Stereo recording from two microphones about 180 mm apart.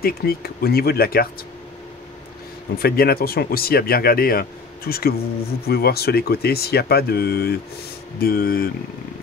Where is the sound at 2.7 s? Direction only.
55° left (ahead or behind).